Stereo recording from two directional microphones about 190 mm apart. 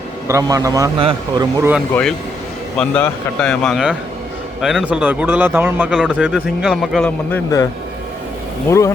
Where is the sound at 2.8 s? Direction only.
5° left (ahead or behind).